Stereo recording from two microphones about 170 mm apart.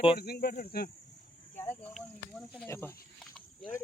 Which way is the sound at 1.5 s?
10° left (ahead or behind).